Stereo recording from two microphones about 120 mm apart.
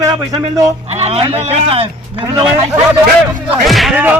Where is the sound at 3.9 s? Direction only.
15° right (ahead or behind).